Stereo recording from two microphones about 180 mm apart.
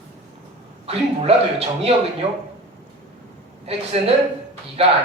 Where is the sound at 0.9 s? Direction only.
35° right (ahead or behind).